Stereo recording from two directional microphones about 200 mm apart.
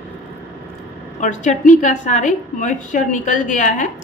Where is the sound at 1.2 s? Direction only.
40° left (ahead or behind).